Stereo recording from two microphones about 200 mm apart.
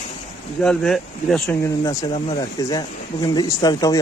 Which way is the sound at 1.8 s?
20° left (ahead or behind).